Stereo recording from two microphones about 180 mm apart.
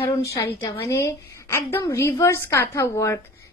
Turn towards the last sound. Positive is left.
turn(degrees=15)  # may be behind; listen again after turning